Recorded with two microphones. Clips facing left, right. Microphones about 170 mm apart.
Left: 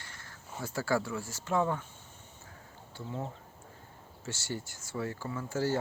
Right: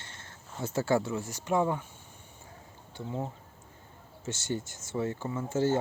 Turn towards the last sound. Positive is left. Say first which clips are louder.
# right 4 dB
turn(degrees=-20)  # may be behind; listen again after turning